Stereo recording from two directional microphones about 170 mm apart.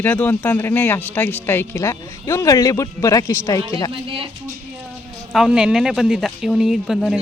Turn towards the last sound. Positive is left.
turn(degrees=0)  # may be behind; listen again after turning